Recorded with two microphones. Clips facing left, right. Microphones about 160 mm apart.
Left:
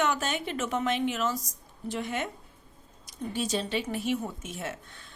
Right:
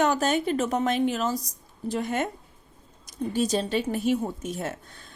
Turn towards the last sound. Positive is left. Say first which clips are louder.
# right 5 dB
turn(degrees=-40)  # may be behind; listen again after turning